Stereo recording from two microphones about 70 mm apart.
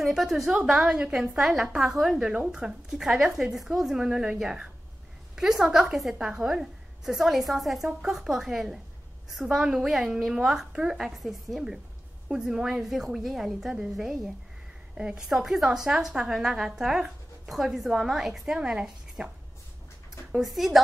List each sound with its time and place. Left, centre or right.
0.0 s a woman's voice: centre
1.0 s a woman's voice: centre
1.4 s a woman's voice: centre